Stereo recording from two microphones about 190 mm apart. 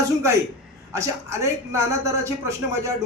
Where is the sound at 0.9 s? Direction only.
15° right (ahead or behind).